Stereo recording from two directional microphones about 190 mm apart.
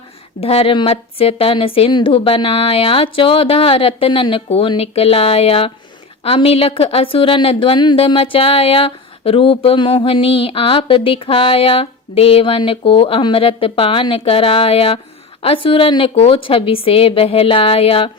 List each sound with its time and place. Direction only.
0.3 s a woman's voice: 30° left (ahead or behind)